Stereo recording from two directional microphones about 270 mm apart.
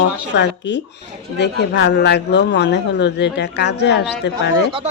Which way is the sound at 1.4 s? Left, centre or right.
Left.